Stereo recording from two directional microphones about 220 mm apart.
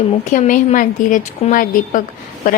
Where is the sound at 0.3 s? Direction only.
35° left (ahead or behind).